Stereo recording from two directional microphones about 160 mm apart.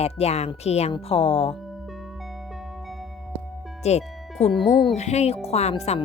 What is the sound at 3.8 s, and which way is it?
Speech, 40° left (ahead or behind).